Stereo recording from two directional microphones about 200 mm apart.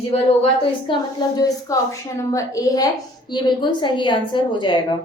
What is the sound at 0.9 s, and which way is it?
A woman's voice, 25° left (ahead or behind).